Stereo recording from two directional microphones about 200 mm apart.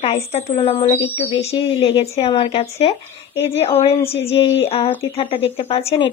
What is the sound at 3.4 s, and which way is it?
Speech, 10° left (ahead or behind).